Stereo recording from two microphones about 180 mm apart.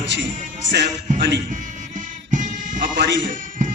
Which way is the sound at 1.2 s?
75° right (ahead or behind).